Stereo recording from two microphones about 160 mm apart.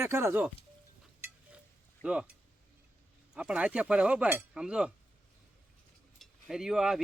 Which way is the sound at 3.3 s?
5° right (ahead or behind).